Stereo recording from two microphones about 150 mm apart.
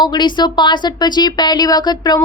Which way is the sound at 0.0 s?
30° left (ahead or behind).